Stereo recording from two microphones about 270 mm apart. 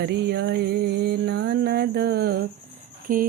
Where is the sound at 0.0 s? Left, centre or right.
Right.